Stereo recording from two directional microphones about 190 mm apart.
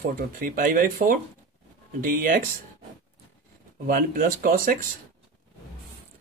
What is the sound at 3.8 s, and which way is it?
Speech, 50° right (ahead or behind).